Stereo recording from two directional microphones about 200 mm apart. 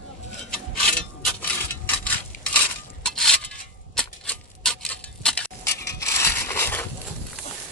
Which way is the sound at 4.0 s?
5° left (ahead or behind).